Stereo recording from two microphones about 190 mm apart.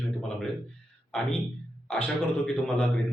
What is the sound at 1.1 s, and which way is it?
Speech, 5° left (ahead or behind).